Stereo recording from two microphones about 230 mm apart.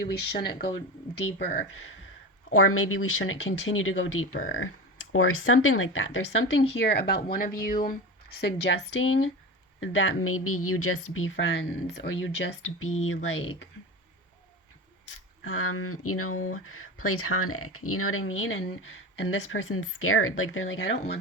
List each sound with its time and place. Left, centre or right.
0.1 s speech: left
2.5 s speech: left
15.4 s speech: left